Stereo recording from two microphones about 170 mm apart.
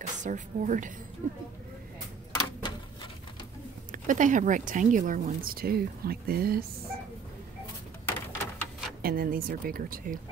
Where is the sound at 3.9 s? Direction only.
50° right (ahead or behind).